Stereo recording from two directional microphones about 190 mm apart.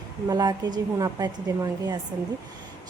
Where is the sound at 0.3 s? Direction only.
20° right (ahead or behind).